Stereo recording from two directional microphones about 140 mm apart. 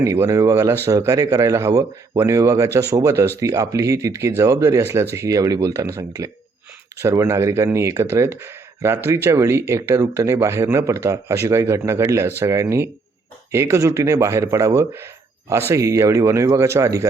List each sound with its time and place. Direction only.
0.0 s speech: 20° right (ahead or behind)